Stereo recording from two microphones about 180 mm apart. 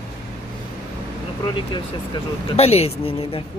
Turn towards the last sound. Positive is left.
turn(degrees=30)  # may be behind; listen again after turning